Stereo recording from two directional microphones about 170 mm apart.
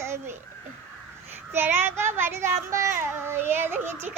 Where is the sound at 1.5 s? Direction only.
15° right (ahead or behind).